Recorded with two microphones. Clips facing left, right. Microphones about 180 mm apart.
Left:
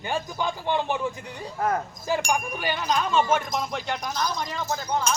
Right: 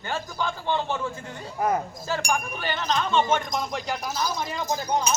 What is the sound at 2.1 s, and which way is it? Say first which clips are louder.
Speech: left 3 dB; 15° left (ahead or behind).